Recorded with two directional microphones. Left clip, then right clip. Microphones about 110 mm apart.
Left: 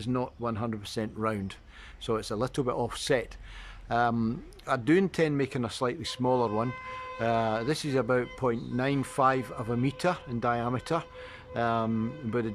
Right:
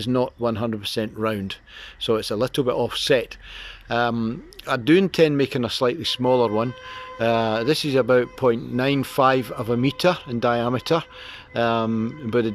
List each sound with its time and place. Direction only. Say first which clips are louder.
0.0 s speech: right 10 dB; 20° right (ahead or behind)
0.9 s a man's voice: right 7 dB; 10° right (ahead or behind)
4.2 s a man's voice: right 5 dB; 5° left (ahead or behind); by 12.5 s 15° right (ahead or behind)